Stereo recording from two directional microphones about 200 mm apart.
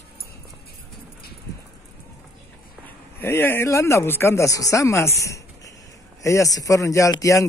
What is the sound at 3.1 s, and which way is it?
Speech, 10° left (ahead or behind).